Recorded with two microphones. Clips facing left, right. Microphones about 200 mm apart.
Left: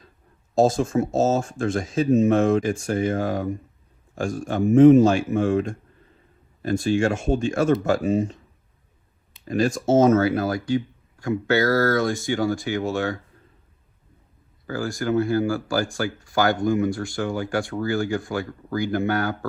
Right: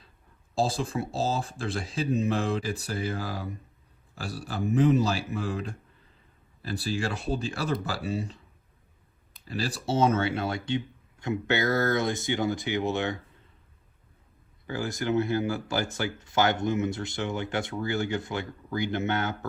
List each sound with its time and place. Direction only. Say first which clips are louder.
0.6 s speech: left 9 dB; 30° right (ahead or behind)
6.7 s speech: left 10 dB; 35° right (ahead or behind)
9.5 s speech: left 10 dB; 35° right (ahead or behind)
14.7 s speech: left 4 dB; 20° right (ahead or behind)